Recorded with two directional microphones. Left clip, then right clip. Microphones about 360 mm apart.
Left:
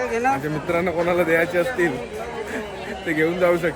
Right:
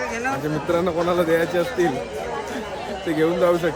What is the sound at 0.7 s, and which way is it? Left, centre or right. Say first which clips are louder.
Speech: even; centre.